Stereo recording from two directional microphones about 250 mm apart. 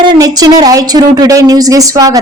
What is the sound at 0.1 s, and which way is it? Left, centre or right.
Speech, centre.